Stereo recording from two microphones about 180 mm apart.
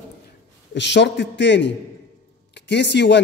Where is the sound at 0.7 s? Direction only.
75° left (ahead or behind).